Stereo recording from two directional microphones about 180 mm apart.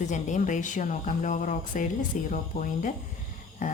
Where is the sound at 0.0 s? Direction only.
40° left (ahead or behind).